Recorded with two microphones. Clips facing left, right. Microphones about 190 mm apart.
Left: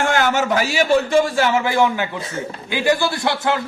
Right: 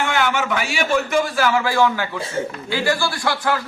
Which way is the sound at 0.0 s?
45° left (ahead or behind).